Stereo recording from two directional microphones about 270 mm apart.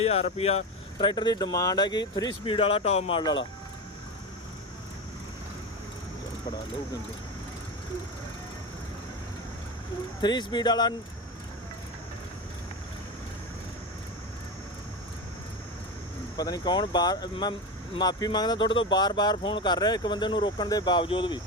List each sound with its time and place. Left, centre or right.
0.0 s speech: left
10.2 s speech: centre
16.4 s speech: centre